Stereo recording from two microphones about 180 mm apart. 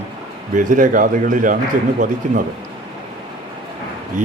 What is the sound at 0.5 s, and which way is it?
A man's voice, 45° right (ahead or behind).